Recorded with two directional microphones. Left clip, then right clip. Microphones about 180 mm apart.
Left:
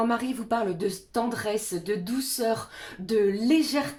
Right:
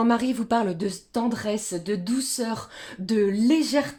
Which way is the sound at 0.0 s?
45° right (ahead or behind).